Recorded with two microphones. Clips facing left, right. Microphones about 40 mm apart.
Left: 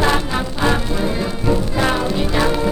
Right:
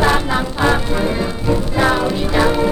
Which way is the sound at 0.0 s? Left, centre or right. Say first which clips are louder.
Right 2 dB; centre.